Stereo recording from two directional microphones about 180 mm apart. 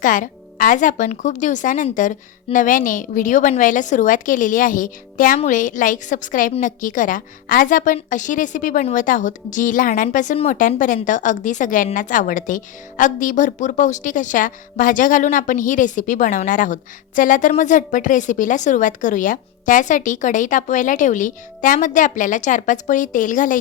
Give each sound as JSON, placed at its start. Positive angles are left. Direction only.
{"t": 0.0, "sound": "a woman's voice", "side_deg": 45}